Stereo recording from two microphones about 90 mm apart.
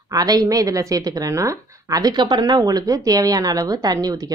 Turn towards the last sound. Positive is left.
turn(degrees=-45)  # may be behind; listen again after turning